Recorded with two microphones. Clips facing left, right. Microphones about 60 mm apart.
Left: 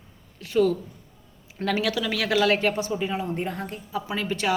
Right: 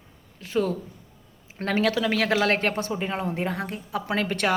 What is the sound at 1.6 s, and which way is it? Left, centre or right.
Speech, right.